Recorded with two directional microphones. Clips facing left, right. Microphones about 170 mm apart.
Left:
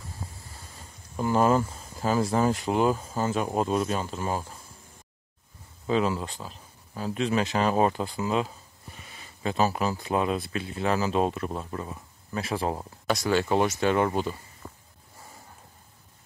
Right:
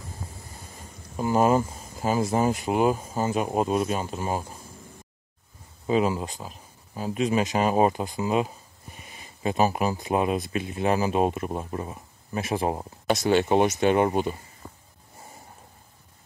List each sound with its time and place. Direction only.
1.1 s speech: 15° right (ahead or behind)
5.9 s speech: 15° right (ahead or behind)